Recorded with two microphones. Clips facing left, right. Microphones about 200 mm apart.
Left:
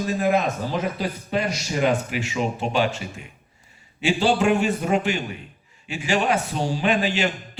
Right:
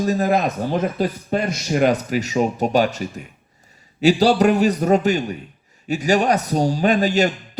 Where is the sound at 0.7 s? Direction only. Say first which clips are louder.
Right 5 dB; 50° right (ahead or behind).